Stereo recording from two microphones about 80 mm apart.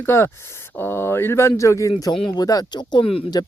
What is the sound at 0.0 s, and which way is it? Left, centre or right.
Speech, left.